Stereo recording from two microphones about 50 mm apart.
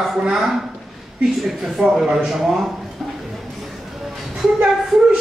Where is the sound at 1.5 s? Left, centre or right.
Centre.